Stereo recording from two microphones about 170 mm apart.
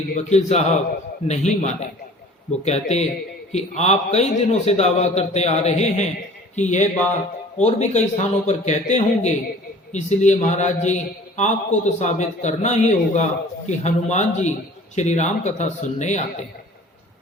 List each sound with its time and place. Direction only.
0.1 s a man's voice: 40° left (ahead or behind)